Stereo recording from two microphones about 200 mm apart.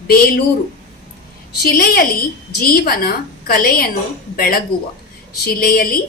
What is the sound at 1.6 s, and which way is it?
A woman's voice, 50° left (ahead or behind).